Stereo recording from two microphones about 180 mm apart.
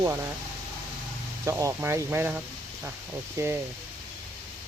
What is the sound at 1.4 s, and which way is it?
Speech, 20° right (ahead or behind).